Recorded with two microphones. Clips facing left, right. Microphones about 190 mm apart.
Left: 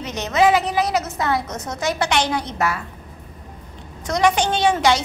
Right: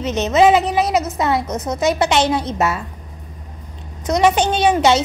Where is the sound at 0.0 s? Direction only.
20° right (ahead or behind).